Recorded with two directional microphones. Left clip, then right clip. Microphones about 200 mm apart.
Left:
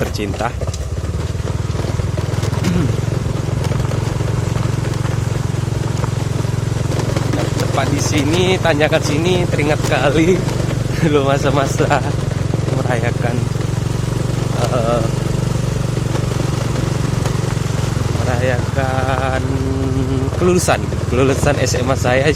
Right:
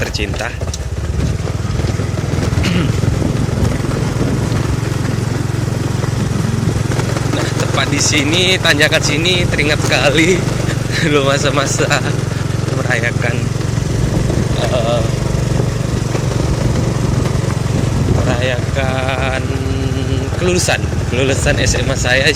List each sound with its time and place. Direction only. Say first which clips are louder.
7.8 s speech: right 4 dB; 10° left (ahead or behind)
18.4 s speech: right 1 dB; 5° left (ahead or behind)
20.5 s speech: even; 25° left (ahead or behind)